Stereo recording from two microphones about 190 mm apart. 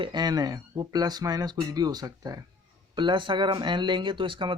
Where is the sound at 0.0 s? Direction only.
20° right (ahead or behind).